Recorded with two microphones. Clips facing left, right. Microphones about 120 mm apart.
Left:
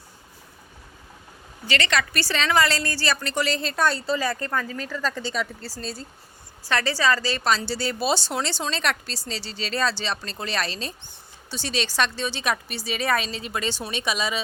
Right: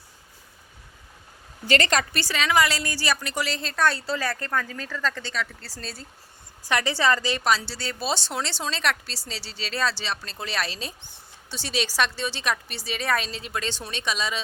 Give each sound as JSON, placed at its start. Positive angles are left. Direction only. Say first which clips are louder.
{"t": 1.6, "sound": "a woman's voice", "louder": "right 2 dB", "side_deg": -45}
{"t": 2.1, "sound": "a woman's voice", "louder": "left 2 dB", "side_deg": -10}
{"t": 3.9, "sound": "speech", "louder": "left 3 dB", "side_deg": 20}
{"t": 6.7, "sound": "a woman's voice", "louder": "even", "side_deg": -15}
{"t": 7.5, "sound": "speech", "louder": "left 2 dB", "side_deg": 0}